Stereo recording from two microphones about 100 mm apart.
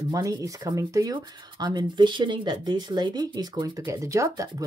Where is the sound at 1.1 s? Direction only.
50° right (ahead or behind).